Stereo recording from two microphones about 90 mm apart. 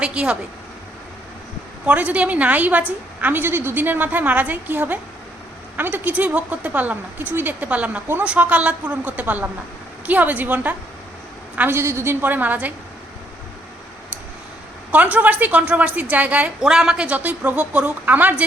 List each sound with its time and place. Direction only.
0.0 s a woman's voice: 10° right (ahead or behind)
1.9 s a woman's voice: 15° right (ahead or behind)
14.9 s a woman's voice: 15° right (ahead or behind)